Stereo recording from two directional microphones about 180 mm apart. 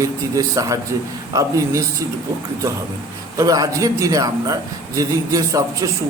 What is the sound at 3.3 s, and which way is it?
A man's voice, 20° right (ahead or behind).